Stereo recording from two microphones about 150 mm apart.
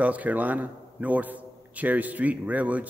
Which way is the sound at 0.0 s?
10° right (ahead or behind).